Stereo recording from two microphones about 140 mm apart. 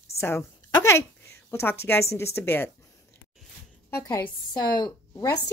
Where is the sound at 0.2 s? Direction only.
15° left (ahead or behind).